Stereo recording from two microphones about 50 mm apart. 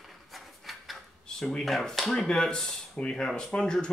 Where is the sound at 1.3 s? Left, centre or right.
Centre.